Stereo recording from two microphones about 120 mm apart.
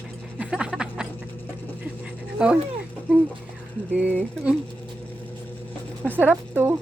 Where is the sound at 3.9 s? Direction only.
10° right (ahead or behind).